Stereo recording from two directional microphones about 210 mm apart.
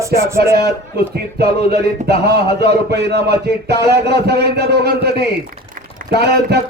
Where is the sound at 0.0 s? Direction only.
15° right (ahead or behind).